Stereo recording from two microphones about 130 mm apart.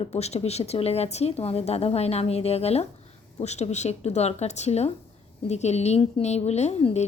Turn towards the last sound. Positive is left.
turn(degrees=60)  # may be behind; listen again after turning